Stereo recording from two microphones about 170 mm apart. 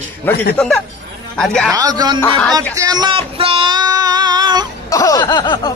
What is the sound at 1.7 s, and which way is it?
Speech, 25° right (ahead or behind).